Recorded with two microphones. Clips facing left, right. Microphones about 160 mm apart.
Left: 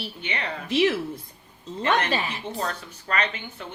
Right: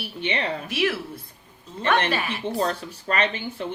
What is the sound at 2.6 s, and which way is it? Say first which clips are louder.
Speech: right 6 dB; 25° right (ahead or behind).